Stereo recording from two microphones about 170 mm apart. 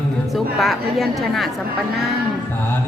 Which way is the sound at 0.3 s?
Centre (ahead or behind).